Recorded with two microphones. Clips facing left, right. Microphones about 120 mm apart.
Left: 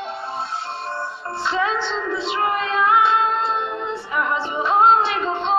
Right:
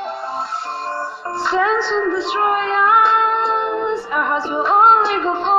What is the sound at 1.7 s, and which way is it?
Music, 55° right (ahead or behind).